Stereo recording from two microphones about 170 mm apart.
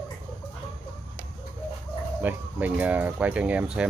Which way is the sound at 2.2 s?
10° right (ahead or behind).